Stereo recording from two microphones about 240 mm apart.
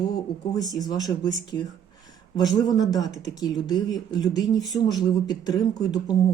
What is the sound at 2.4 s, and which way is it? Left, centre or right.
Speech, centre.